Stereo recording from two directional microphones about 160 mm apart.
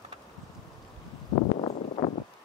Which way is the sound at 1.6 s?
40° left (ahead or behind).